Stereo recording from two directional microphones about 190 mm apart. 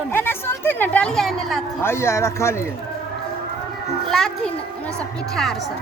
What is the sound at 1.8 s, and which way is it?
Speech, 15° left (ahead or behind).